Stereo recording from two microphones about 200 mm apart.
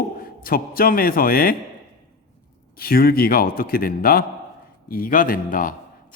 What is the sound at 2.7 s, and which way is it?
A man's voice, 50° left (ahead or behind).